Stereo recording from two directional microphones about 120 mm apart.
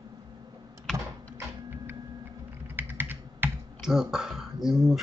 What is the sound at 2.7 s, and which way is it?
Computer keyboard, 15° right (ahead or behind).